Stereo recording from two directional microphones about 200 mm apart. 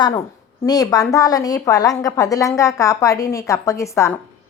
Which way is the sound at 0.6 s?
15° left (ahead or behind).